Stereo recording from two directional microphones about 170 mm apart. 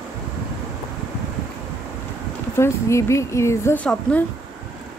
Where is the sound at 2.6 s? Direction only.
15° left (ahead or behind).